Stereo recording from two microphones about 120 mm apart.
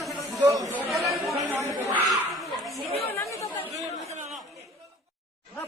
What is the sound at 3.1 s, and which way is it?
Chatter, 25° left (ahead or behind).